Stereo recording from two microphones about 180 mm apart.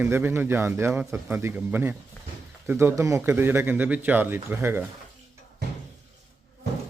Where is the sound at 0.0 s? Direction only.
10° right (ahead or behind).